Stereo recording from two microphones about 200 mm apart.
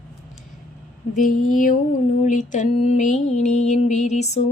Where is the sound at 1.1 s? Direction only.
40° left (ahead or behind).